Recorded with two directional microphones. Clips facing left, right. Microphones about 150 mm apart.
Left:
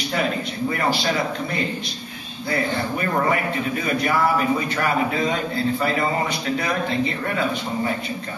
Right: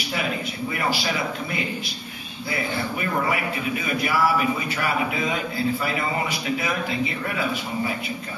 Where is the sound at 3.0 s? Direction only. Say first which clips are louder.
Left 3 dB; 40° left (ahead or behind).